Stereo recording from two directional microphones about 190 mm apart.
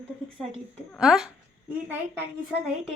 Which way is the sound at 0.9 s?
5° right (ahead or behind).